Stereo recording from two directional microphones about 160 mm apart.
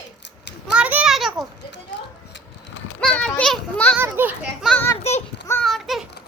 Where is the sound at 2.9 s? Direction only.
5° left (ahead or behind).